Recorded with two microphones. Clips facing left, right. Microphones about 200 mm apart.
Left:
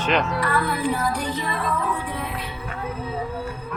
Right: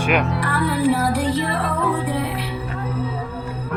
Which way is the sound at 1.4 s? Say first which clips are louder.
Right 4 dB; 65° right (ahead or behind).